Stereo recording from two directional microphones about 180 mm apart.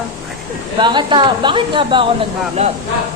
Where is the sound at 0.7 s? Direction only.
25° right (ahead or behind).